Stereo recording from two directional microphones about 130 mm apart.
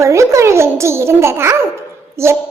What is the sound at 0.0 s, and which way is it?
A child's voice, 20° right (ahead or behind).